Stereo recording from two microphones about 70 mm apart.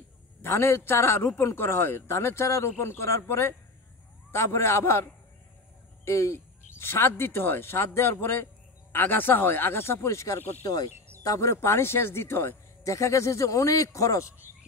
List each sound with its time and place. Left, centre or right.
0.4 s speech: left
10.6 s speech: left
11.2 s speech: left